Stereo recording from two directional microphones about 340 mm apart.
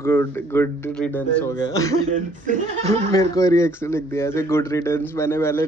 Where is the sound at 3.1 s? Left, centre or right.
Centre.